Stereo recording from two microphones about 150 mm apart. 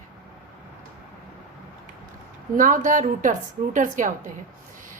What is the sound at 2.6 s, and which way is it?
A woman's voice, 60° right (ahead or behind).